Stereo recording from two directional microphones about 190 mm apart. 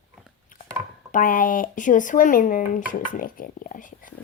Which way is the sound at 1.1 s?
45° left (ahead or behind).